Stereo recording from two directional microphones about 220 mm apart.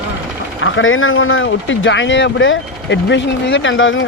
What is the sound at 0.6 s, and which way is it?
Speech, 65° left (ahead or behind).